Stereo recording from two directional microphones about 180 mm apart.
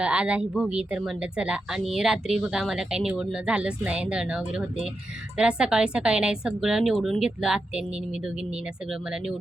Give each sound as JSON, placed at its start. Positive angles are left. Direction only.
{"t": 0.0, "sound": "speech", "side_deg": -5}